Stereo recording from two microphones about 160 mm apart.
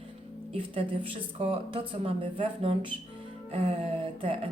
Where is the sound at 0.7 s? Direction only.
35° right (ahead or behind).